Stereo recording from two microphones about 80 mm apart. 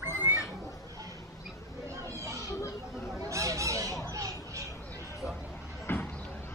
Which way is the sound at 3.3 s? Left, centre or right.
Right.